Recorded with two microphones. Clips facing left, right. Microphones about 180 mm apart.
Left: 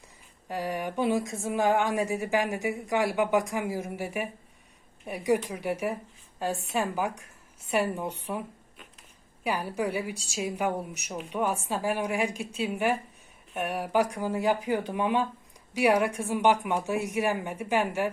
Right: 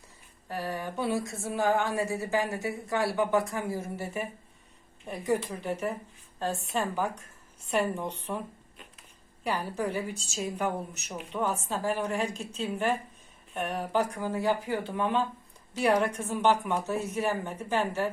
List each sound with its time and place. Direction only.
0.4 s speech: 15° left (ahead or behind)